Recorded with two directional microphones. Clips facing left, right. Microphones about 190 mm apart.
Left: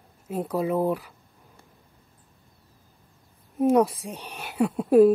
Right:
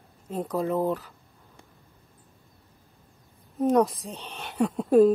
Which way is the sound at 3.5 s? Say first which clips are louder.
Left 2 dB; 10° left (ahead or behind).